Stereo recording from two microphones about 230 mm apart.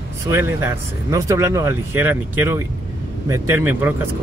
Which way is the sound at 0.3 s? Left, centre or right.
Centre.